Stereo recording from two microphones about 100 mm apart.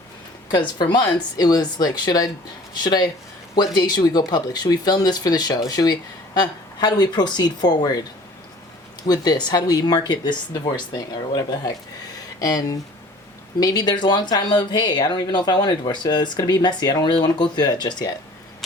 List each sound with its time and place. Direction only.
0.8 s speech: 40° left (ahead or behind)
9.0 s speech: 40° left (ahead or behind)